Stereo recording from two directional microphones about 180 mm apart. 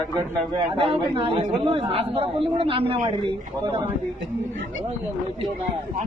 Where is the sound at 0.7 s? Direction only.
30° right (ahead or behind).